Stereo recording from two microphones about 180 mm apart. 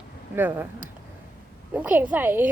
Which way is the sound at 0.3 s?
10° right (ahead or behind).